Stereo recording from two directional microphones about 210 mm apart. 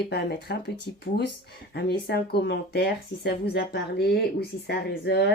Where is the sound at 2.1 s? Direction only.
50° left (ahead or behind).